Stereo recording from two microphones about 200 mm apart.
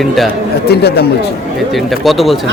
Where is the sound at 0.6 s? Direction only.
55° left (ahead or behind).